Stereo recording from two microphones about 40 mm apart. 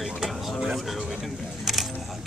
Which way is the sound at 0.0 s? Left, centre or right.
Centre.